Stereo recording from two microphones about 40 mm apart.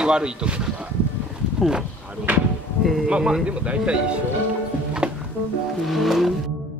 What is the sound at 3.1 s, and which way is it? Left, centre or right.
Speech, centre.